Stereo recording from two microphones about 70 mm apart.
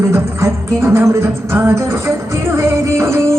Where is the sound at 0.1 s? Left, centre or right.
Right.